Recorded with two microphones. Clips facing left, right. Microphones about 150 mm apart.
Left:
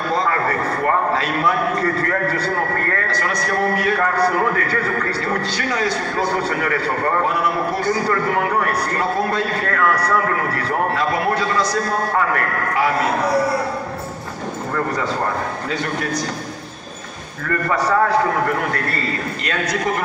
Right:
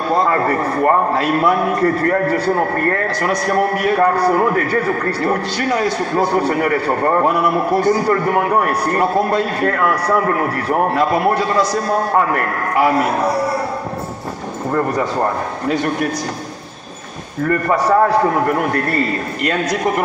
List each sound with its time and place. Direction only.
0.3 s a man's voice: 30° right (ahead or behind)
11.3 s a man's voice: 25° right (ahead or behind)
17.5 s a man's voice: 30° right (ahead or behind)